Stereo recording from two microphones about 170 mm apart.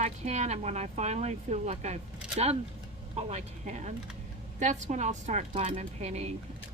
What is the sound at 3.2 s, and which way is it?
Speech, 40° right (ahead or behind).